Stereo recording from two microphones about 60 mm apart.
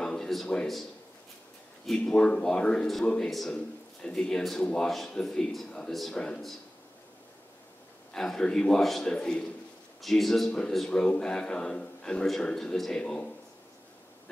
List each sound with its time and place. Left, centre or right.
0.0 s a sound: centre
1.9 s a man's voice: centre
3.3 s a man's voice: centre
3.5 s a man's voice: centre
8.1 s a man's voice: centre
10.0 s a man's voice: centre